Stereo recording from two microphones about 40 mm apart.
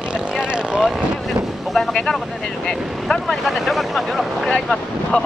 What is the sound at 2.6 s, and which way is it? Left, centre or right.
Speech, centre.